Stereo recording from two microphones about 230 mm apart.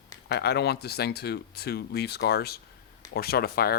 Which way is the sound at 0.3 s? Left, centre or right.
Left.